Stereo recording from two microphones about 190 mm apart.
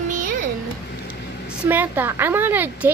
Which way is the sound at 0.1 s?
45° right (ahead or behind).